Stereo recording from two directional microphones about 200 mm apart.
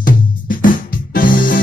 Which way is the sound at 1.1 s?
45° left (ahead or behind).